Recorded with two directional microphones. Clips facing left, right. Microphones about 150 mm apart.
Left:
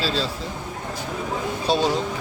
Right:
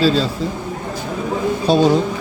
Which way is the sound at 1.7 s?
50° right (ahead or behind).